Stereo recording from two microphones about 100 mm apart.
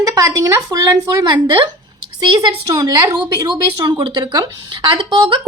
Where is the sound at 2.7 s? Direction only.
40° right (ahead or behind).